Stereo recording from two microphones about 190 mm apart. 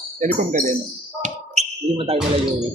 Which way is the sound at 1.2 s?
35° right (ahead or behind).